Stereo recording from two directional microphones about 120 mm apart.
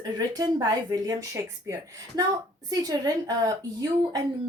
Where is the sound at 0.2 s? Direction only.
30° right (ahead or behind).